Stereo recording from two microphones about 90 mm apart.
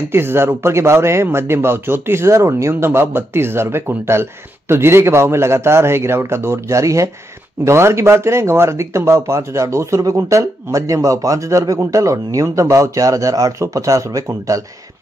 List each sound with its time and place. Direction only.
0.1 s speech: 25° right (ahead or behind)